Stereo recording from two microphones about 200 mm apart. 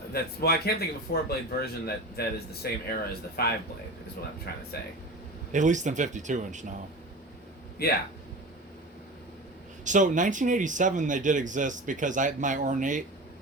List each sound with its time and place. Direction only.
0.1 s speech: 50° left (ahead or behind)
4.7 s speech: 55° left (ahead or behind)
5.5 s speech: 40° right (ahead or behind)
7.8 s speech: 50° left (ahead or behind)
9.8 s speech: 40° right (ahead or behind)